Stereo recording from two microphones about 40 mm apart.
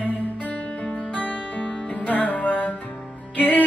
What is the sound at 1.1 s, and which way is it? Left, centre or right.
Music, left.